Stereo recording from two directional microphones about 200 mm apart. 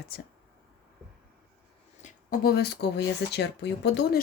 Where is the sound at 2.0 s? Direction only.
45° left (ahead or behind).